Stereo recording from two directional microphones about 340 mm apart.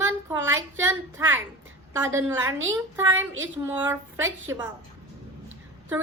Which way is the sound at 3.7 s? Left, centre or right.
Centre.